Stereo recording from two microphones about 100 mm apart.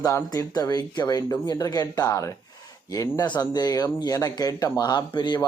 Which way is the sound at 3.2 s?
50° left (ahead or behind).